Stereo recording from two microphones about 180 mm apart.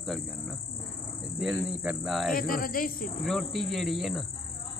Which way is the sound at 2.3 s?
55° left (ahead or behind).